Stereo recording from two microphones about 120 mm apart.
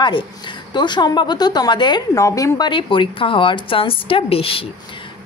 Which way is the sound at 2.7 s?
45° left (ahead or behind).